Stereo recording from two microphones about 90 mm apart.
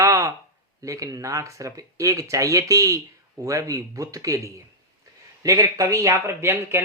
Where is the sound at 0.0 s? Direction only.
35° right (ahead or behind).